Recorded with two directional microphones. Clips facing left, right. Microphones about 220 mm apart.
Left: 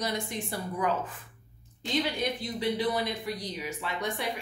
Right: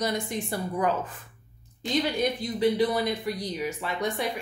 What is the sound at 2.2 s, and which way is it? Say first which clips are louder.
A woman's voice: right 6 dB; 45° right (ahead or behind).